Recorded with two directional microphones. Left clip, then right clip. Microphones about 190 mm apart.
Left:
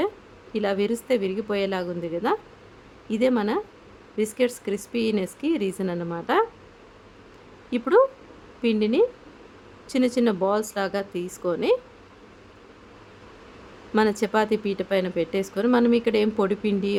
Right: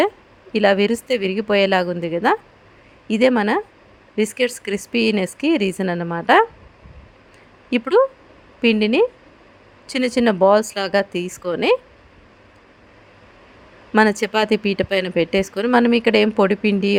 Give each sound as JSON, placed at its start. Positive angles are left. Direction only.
{"t": 0.5, "sound": "speech", "side_deg": -25}
{"t": 7.7, "sound": "speech", "side_deg": -25}
{"t": 13.9, "sound": "speech", "side_deg": -25}